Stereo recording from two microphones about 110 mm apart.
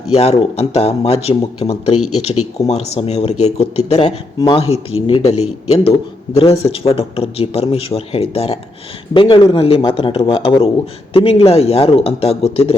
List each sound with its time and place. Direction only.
0.1 s speech: 65° left (ahead or behind)
4.5 s speech: 60° left (ahead or behind)
6.4 s speech: 60° left (ahead or behind)
9.1 s speech: 50° left (ahead or behind)